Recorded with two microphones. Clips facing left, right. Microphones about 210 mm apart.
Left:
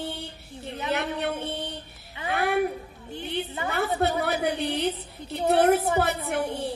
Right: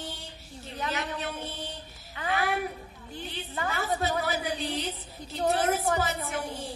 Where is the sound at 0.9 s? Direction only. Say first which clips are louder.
Left 9 dB; 60° left (ahead or behind).